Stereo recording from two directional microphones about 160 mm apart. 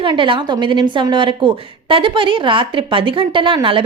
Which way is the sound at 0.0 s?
30° right (ahead or behind).